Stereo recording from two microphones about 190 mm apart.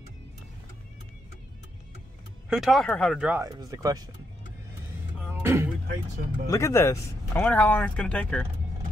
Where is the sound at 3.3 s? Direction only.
15° right (ahead or behind).